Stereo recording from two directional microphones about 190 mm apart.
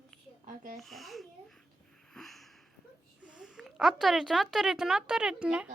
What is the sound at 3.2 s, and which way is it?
A woman's voice, 5° right (ahead or behind).